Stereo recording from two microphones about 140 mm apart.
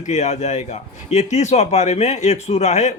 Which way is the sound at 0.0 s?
55° left (ahead or behind).